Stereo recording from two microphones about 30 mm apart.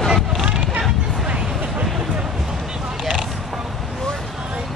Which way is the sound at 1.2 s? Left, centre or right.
Right.